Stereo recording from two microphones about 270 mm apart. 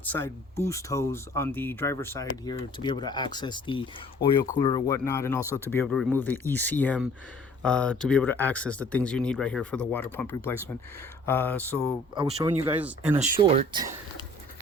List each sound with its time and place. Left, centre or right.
0.0 s speech: centre
12.1 s speech: centre
13.4 s speech: centre